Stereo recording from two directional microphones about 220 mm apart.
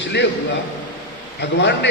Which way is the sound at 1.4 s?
50° left (ahead or behind).